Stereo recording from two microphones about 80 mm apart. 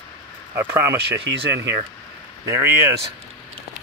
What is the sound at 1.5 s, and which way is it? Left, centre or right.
Speech, right.